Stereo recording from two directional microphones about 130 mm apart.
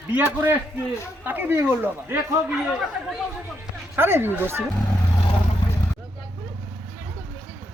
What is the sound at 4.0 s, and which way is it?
Speech, 15° right (ahead or behind).